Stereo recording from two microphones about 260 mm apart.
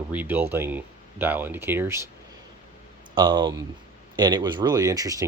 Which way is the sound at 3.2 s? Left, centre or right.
Centre.